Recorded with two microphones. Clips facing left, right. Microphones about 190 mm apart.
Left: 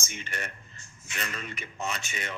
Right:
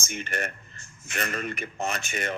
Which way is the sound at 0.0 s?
50° right (ahead or behind).